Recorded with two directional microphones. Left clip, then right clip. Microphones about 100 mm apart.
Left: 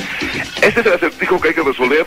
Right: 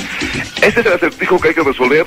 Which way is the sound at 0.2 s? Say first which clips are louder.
Right 1 dB; 35° right (ahead or behind).